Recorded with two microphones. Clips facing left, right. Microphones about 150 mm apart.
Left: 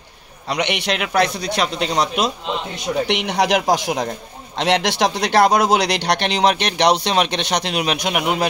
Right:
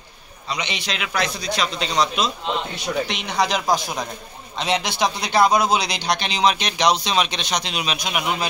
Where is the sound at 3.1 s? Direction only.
70° left (ahead or behind).